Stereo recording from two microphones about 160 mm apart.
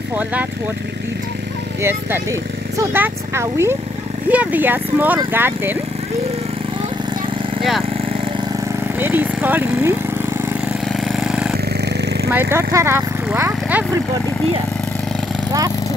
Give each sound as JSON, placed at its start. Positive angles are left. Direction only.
{"t": 0.1, "sound": "speech", "side_deg": -10}
{"t": 1.8, "sound": "speech", "side_deg": -15}
{"t": 9.0, "sound": "speech", "side_deg": -10}
{"t": 10.9, "sound": "vehicle", "side_deg": 0}
{"t": 11.7, "sound": "a sound", "side_deg": -90}
{"t": 12.3, "sound": "speech", "side_deg": -15}